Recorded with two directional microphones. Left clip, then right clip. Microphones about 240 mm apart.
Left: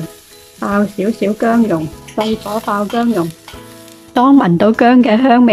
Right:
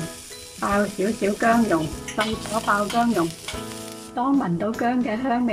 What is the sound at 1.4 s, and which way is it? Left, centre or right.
Speech, left.